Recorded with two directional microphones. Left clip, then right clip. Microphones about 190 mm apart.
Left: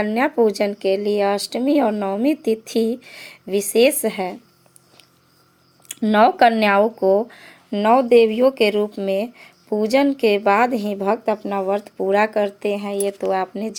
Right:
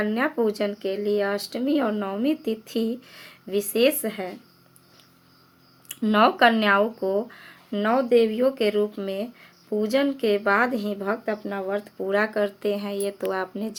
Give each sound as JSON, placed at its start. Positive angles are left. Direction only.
{"t": 0.0, "sound": "speech", "side_deg": 25}
{"t": 5.9, "sound": "speech", "side_deg": 25}